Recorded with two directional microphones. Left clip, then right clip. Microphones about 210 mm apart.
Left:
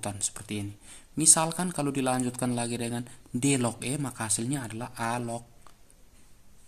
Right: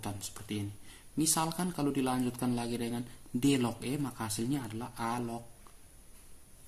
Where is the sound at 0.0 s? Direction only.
45° left (ahead or behind).